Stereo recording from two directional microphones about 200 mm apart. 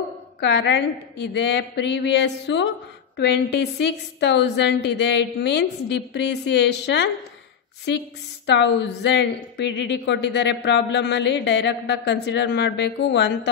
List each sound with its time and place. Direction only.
0.4 s a woman's voice: 60° left (ahead or behind)
3.8 s a woman's voice: 60° left (ahead or behind)
8.5 s a woman's voice: 60° left (ahead or behind)